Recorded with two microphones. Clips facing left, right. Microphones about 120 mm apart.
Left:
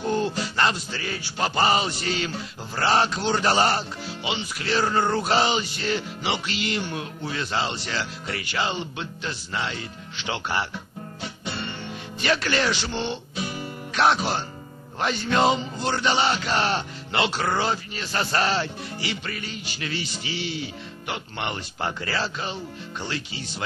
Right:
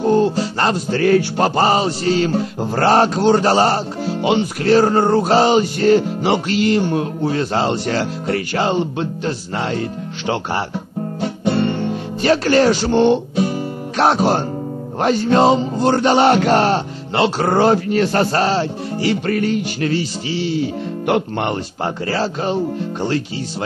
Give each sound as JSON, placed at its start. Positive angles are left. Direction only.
{"t": 0.0, "sound": "music", "side_deg": -35}
{"t": 1.5, "sound": "music", "side_deg": -40}
{"t": 19.9, "sound": "speech", "side_deg": -35}
{"t": 21.1, "sound": "music", "side_deg": -45}